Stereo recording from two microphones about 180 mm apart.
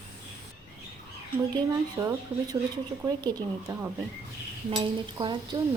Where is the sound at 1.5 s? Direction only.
20° right (ahead or behind).